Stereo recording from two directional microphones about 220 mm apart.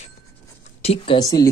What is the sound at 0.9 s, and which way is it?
Speech, 25° left (ahead or behind).